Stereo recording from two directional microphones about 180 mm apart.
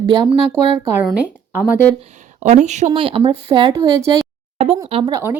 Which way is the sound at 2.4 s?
40° right (ahead or behind).